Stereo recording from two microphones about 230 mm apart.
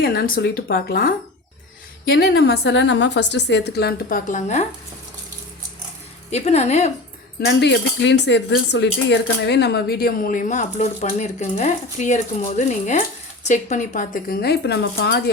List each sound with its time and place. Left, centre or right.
0.0 s a woman's voice: left
2.3 s a woman's voice: left
6.3 s speech: left
7.4 s speech: left